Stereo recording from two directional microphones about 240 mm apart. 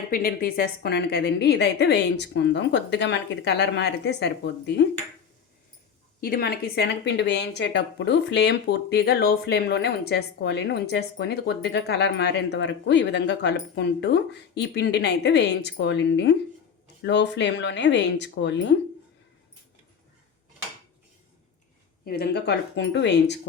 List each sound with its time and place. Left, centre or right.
0.1 s speech: left
6.1 s speech: left
22.0 s speech: left